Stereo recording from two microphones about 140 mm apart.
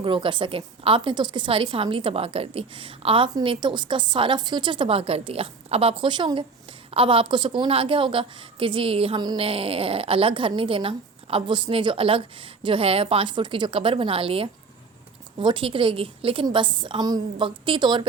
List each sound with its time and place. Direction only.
0.0 s a woman's voice: 35° right (ahead or behind)